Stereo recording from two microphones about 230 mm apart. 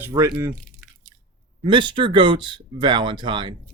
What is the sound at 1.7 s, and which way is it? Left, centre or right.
Speech, right.